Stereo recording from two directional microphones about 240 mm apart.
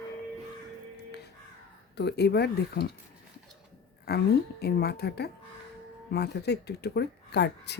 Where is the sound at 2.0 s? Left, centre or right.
Left.